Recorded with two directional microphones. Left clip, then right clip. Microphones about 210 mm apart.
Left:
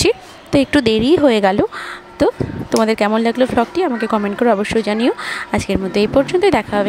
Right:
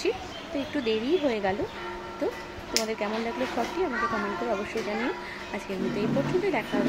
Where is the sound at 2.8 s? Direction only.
50° left (ahead or behind).